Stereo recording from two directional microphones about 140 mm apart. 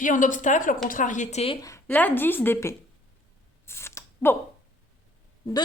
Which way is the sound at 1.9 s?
10° left (ahead or behind).